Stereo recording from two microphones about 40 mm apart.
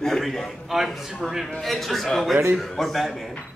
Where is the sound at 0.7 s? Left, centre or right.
Centre.